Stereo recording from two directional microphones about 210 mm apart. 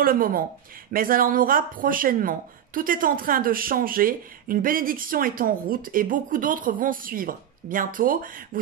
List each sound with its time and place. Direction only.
0.0 s speech: 45° right (ahead or behind)